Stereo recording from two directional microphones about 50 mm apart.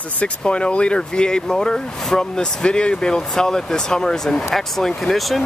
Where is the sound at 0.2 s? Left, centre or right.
Left.